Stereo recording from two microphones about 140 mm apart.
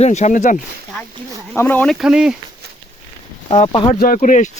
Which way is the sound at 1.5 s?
15° left (ahead or behind).